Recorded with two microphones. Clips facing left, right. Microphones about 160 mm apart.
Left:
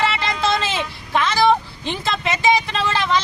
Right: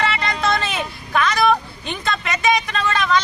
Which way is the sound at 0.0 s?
25° left (ahead or behind).